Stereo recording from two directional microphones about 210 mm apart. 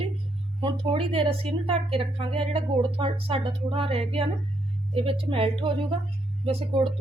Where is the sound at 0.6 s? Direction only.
25° right (ahead or behind).